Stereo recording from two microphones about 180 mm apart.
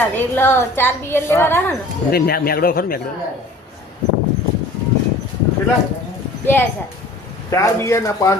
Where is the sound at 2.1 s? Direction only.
55° left (ahead or behind).